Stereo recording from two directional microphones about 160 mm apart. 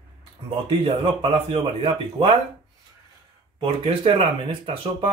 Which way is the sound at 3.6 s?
35° right (ahead or behind).